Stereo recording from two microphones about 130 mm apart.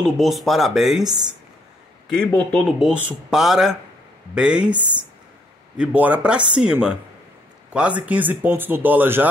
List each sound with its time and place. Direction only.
0.0 s speech: centre (ahead or behind)
2.1 s speech: 10° left (ahead or behind)
2.8 s speech: 10° right (ahead or behind)
5.8 s speech: 10° right (ahead or behind)